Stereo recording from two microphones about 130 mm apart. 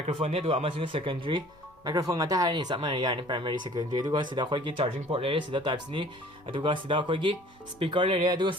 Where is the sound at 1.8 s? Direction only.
30° right (ahead or behind).